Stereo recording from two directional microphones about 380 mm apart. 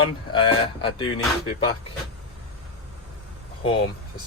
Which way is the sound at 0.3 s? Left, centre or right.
Centre.